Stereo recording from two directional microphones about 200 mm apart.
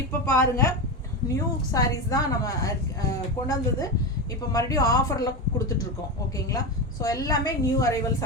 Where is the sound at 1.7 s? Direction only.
15° left (ahead or behind).